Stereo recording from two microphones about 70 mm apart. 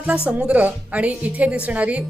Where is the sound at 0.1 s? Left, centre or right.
Centre.